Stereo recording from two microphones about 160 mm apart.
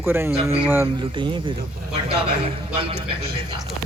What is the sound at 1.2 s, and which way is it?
Speech, 30° right (ahead or behind).